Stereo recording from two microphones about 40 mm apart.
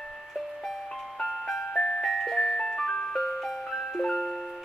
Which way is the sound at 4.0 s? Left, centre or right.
Centre.